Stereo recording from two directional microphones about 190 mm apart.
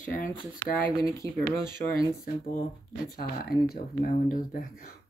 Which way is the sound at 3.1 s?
50° left (ahead or behind).